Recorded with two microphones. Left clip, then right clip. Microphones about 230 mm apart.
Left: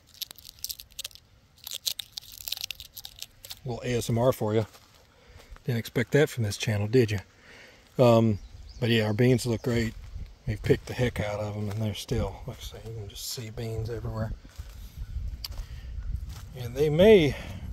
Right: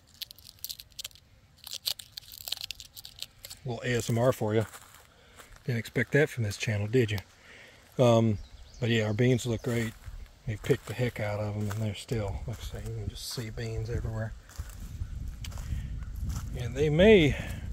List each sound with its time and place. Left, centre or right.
1.6 s crunch: centre
2.4 s a sound: centre
5.7 s speech: left
16.5 s speech: left